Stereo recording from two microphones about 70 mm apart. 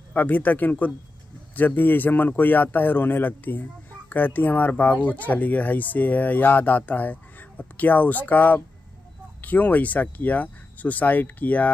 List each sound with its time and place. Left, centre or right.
0.1 s speech: left